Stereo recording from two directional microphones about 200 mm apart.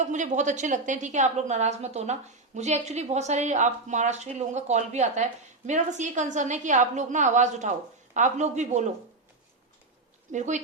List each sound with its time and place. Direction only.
0.0 s a woman's voice: 35° right (ahead or behind)
10.3 s a woman's voice: 35° right (ahead or behind)